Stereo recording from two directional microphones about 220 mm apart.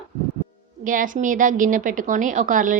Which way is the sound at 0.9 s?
35° right (ahead or behind).